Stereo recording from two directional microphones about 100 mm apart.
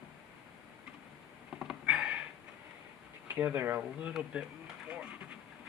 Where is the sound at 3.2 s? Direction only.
20° right (ahead or behind).